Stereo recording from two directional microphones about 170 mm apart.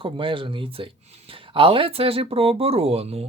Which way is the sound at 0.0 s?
30° right (ahead or behind).